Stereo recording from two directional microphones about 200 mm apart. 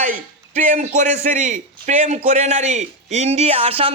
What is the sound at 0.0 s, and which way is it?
A man's voice, 35° right (ahead or behind).